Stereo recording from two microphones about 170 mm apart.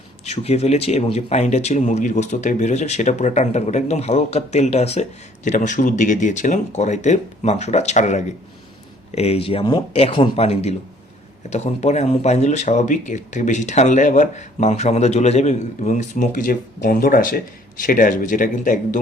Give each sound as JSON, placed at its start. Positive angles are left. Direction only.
{"t": 0.3, "sound": "speech", "side_deg": 40}